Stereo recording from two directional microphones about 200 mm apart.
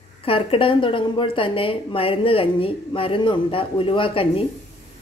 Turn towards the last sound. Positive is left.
turn(degrees=30)  # may be behind; listen again after turning